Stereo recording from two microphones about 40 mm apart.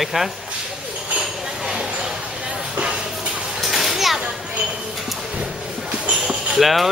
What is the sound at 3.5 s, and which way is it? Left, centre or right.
Children playing, centre.